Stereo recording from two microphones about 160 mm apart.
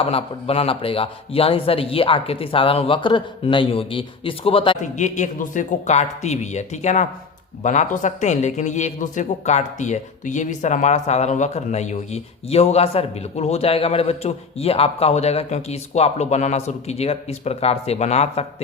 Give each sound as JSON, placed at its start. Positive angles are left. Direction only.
{"t": 0.0, "sound": "speech", "side_deg": 35}
{"t": 4.8, "sound": "speech", "side_deg": 50}